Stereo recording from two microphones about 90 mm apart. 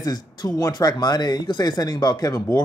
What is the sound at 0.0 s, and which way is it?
A man's voice, 50° left (ahead or behind).